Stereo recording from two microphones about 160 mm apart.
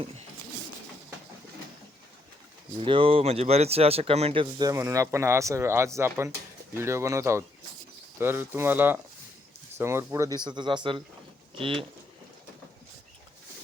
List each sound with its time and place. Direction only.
2.8 s speech: 35° right (ahead or behind)